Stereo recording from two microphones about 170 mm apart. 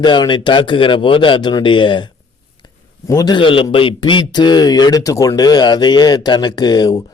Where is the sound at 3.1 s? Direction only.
25° left (ahead or behind).